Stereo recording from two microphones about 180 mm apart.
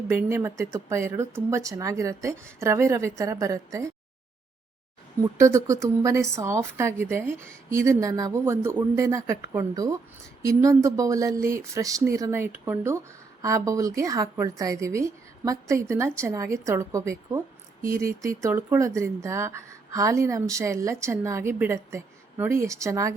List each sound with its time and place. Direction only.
0.1 s a woman's voice: 15° right (ahead or behind)
5.4 s a woman's voice: 15° right (ahead or behind)